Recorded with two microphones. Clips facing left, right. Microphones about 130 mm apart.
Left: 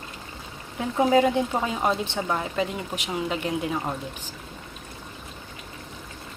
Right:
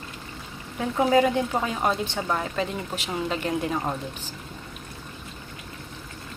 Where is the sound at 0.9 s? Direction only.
20° left (ahead or behind).